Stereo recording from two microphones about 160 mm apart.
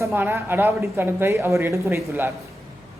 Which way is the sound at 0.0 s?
15° right (ahead or behind).